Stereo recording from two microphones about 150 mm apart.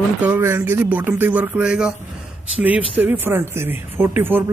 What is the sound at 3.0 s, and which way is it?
Speech, 15° right (ahead or behind).